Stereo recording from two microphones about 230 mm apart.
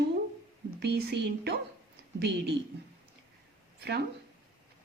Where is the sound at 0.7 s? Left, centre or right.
Right.